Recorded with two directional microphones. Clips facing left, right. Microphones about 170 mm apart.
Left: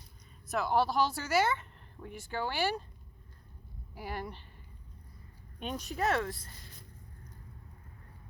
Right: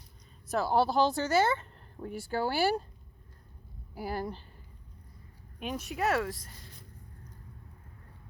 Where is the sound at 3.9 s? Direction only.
35° right (ahead or behind).